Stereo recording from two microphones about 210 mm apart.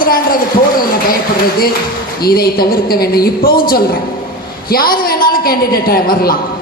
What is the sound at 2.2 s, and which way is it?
A woman's voice, 45° left (ahead or behind).